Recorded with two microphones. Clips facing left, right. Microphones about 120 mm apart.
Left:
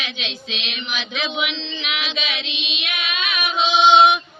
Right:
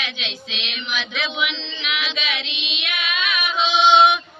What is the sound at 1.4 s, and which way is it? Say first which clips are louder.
Female singing: even; 25° left (ahead or behind).